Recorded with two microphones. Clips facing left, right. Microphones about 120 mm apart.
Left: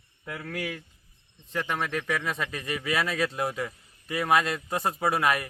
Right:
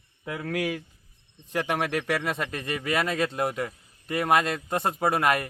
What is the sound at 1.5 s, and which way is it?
Speech, 15° right (ahead or behind).